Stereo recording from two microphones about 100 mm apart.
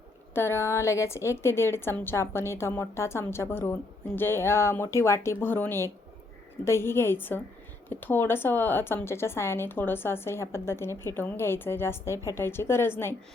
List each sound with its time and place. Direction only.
0.3 s a woman's voice: 25° left (ahead or behind)